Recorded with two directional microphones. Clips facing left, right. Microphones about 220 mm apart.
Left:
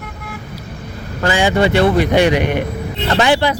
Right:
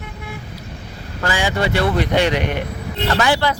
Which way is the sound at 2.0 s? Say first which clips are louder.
Left 5 dB; 10° left (ahead or behind).